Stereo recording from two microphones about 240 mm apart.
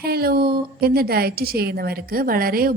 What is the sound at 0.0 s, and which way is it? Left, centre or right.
A woman's voice, right.